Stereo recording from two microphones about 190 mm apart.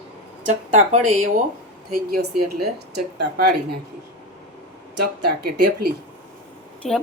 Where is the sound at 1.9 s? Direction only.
55° right (ahead or behind).